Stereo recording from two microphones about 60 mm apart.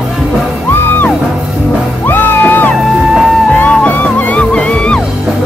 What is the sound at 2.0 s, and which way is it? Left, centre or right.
Music, left.